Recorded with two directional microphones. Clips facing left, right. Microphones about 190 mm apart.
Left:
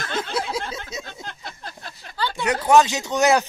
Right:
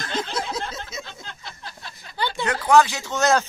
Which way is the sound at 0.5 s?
10° left (ahead or behind).